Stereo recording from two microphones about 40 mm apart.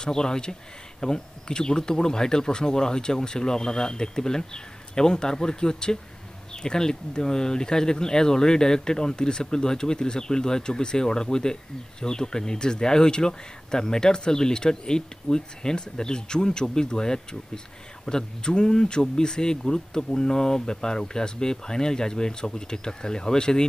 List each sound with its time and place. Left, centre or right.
0.0 s a man's voice: centre